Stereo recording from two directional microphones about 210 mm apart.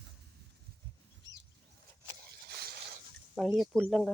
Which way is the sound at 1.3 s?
60° right (ahead or behind).